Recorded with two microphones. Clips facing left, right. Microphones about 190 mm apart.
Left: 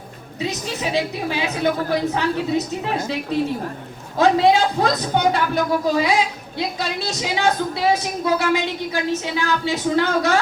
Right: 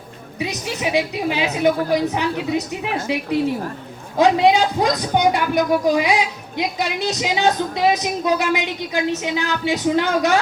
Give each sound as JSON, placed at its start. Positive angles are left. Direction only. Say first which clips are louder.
{"t": 0.3, "sound": "speech", "louder": "even", "side_deg": -15}